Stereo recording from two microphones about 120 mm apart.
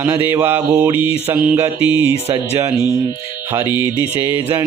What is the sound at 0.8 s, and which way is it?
Music, 15° right (ahead or behind).